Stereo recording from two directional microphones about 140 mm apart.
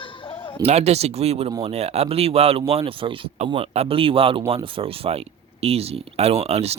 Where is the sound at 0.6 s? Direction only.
50° right (ahead or behind).